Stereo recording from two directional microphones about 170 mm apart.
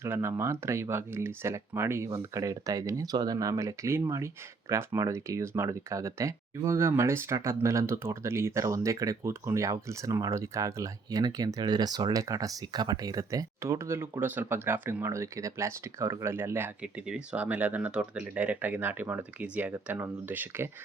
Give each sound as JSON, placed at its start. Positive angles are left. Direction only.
{"t": 0.0, "sound": "speech", "side_deg": -15}